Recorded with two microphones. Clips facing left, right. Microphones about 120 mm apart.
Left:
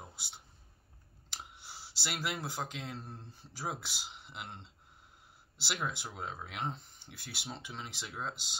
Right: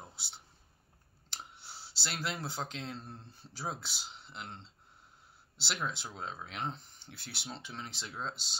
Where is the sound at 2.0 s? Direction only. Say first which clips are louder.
Even; 10° left (ahead or behind).